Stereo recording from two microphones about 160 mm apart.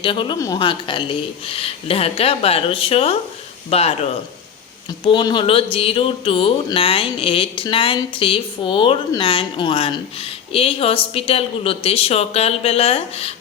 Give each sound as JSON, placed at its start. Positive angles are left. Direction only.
{"t": 0.0, "sound": "speech", "side_deg": 30}
{"t": 5.0, "sound": "speech", "side_deg": 30}